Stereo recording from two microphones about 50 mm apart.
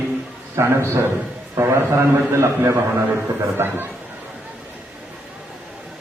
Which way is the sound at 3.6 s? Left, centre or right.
Right.